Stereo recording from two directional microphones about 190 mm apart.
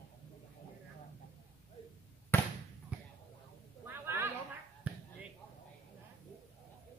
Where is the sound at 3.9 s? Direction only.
10° right (ahead or behind).